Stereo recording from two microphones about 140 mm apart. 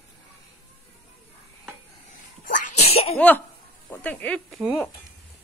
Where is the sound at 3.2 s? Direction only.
10° left (ahead or behind).